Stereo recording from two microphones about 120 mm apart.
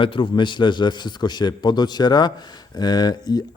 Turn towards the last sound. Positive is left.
turn(degrees=35)  # may be behind; listen again after turning